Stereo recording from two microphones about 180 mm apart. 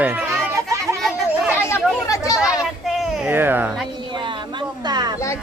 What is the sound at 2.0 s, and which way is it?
Chatter, 20° left (ahead or behind).